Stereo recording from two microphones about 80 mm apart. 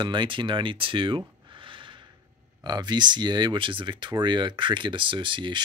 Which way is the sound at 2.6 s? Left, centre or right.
Right.